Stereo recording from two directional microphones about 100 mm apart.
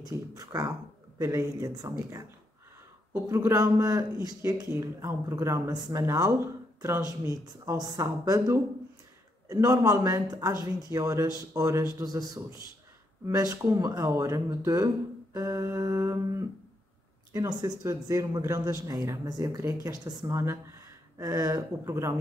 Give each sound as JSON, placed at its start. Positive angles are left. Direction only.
{"t": 0.1, "sound": "speech", "side_deg": -35}
{"t": 3.3, "sound": "speech", "side_deg": -30}